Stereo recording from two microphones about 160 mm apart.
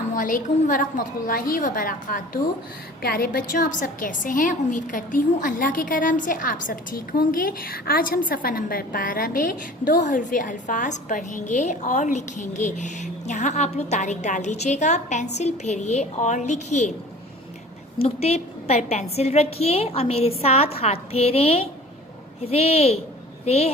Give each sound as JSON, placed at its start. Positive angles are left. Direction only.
{"t": 0.1, "sound": "a woman's voice", "side_deg": 55}
{"t": 18.0, "sound": "a woman's voice", "side_deg": 40}